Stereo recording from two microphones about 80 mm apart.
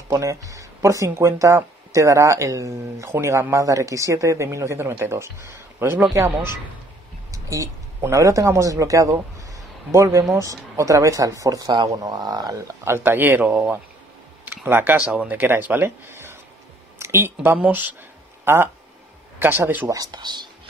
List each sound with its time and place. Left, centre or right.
0.1 s speech: right
7.2 s a sound: right
8.0 s speech: right
12.5 s speech: right
14.4 s computer keyboard: right
15.0 s speech: centre
19.9 s speech: right